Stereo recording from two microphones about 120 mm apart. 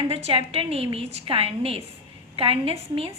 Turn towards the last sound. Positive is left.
turn(degrees=-55)  # may be behind; listen again after turning